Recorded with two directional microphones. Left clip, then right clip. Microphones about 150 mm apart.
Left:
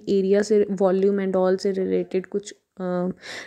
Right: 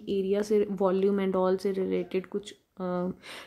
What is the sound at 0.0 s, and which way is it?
Speech, 40° left (ahead or behind).